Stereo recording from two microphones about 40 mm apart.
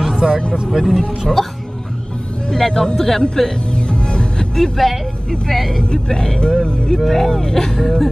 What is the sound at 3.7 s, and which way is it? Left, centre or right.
Music, left.